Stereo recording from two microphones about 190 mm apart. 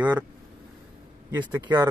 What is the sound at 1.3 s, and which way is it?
Speech, 10° right (ahead or behind).